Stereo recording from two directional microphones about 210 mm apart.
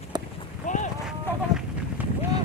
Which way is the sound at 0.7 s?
35° left (ahead or behind).